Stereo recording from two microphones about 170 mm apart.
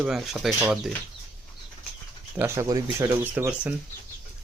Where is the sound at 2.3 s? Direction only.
15° right (ahead or behind).